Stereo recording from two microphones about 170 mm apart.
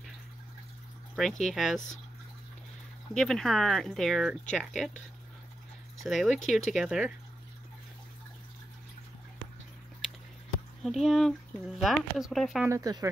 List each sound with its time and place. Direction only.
1.1 s speech: centre (ahead or behind)
3.2 s speech: centre (ahead or behind)
6.0 s speech: centre (ahead or behind)
10.8 s speech: centre (ahead or behind)
12.6 s speech: 20° right (ahead or behind)